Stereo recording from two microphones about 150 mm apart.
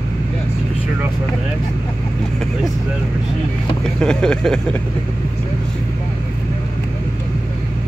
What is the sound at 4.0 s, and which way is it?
Speech, 5° left (ahead or behind).